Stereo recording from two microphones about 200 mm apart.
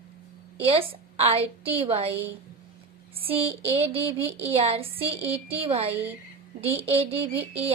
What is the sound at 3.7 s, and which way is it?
Speech, 30° right (ahead or behind).